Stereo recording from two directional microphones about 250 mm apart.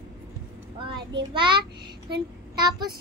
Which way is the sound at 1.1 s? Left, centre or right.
Centre.